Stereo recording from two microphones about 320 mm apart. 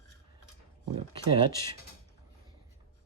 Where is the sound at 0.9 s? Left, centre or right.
Centre.